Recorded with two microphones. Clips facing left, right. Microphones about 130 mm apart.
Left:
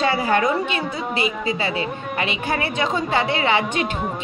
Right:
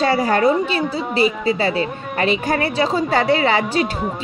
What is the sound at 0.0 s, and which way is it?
A woman's voice, 40° right (ahead or behind).